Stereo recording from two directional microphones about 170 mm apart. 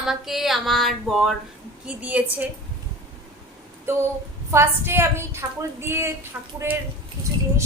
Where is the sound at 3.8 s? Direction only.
15° right (ahead or behind).